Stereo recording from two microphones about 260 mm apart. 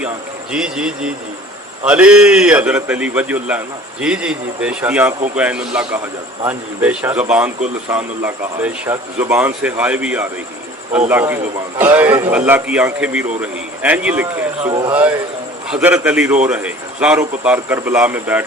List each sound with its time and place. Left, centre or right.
0.5 s a man's voice: centre
14.7 s a man's voice: centre
15.7 s a man's voice: centre